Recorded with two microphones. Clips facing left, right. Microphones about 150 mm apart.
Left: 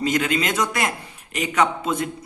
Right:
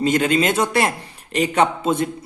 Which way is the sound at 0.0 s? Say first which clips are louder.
Right 4 dB; 25° right (ahead or behind).